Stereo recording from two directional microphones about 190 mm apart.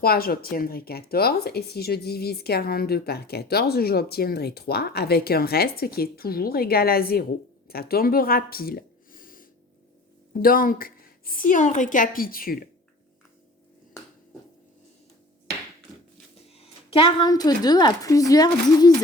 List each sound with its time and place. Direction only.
0.0 s a woman's voice: 50° left (ahead or behind)
16.6 s a woman's voice: 30° left (ahead or behind)